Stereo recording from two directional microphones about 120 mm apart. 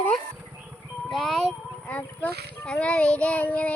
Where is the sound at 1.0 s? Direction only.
Centre (ahead or behind).